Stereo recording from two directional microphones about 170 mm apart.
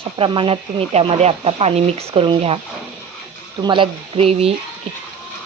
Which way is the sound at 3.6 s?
30° right (ahead or behind).